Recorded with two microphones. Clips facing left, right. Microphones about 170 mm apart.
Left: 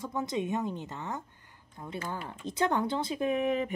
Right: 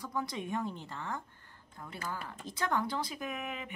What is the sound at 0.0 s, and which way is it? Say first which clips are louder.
Speech: left 5 dB; 25° left (ahead or behind).